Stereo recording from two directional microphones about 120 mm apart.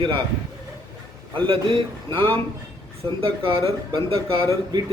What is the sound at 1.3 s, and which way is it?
Speech, 45° right (ahead or behind).